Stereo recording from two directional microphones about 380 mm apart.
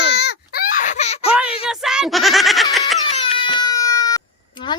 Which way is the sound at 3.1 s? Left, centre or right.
Centre.